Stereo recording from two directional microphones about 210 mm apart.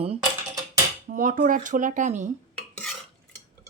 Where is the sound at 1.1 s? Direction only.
40° right (ahead or behind).